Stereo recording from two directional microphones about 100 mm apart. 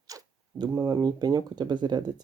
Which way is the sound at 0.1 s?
35° right (ahead or behind).